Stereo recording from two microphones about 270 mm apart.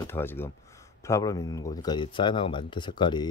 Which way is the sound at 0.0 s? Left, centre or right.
Centre.